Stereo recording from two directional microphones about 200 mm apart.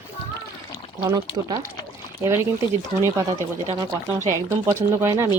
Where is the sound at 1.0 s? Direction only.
20° right (ahead or behind).